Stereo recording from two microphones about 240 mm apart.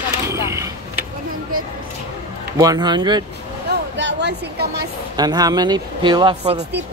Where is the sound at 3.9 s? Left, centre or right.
Right.